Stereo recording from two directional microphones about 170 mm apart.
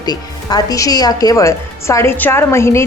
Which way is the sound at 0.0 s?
25° left (ahead or behind).